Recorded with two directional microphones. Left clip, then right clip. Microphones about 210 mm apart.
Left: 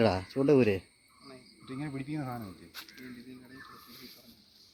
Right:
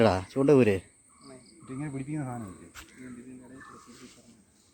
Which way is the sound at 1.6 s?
15° right (ahead or behind).